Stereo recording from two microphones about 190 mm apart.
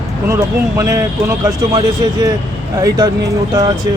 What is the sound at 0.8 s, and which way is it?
A woman's voice, 15° right (ahead or behind).